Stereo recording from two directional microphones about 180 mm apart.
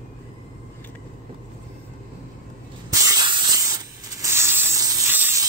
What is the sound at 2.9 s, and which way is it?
Spray, 20° right (ahead or behind).